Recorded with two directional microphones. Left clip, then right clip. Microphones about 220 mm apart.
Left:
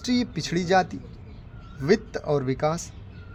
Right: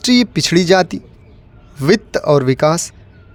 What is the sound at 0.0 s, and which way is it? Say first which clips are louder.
A woman's voice: right 13 dB; 40° right (ahead or behind).